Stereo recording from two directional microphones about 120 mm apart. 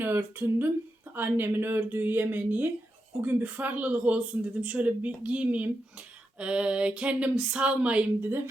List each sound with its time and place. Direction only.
0.0 s speech: 15° right (ahead or behind)